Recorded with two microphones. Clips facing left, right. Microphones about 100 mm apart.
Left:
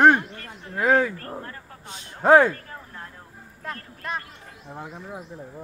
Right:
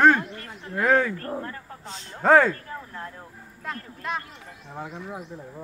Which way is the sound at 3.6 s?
Centre (ahead or behind).